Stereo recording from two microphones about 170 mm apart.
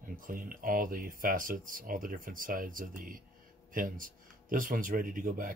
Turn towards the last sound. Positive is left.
turn(degrees=-55)  # may be behind; listen again after turning